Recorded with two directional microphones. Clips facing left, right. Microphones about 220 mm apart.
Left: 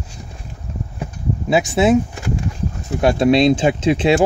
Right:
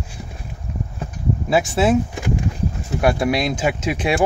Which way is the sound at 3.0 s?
25° left (ahead or behind).